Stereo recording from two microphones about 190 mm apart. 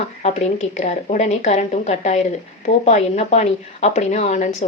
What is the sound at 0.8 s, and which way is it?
A woman's voice, 35° left (ahead or behind).